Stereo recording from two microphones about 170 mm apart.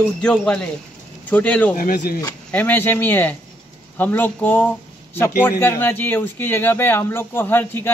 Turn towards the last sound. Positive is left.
turn(degrees=10)  # may be behind; listen again after turning